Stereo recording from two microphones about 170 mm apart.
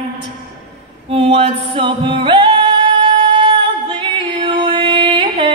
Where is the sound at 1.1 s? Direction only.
35° right (ahead or behind).